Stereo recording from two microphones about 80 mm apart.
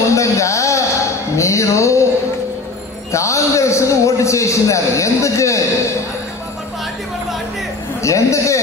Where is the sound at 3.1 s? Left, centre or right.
Left.